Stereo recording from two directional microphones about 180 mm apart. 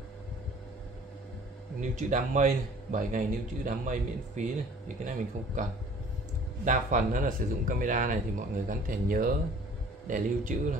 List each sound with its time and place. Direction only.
1.8 s a man's voice: 45° right (ahead or behind)